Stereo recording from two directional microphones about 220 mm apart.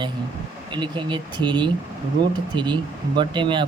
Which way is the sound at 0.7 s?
20° right (ahead or behind).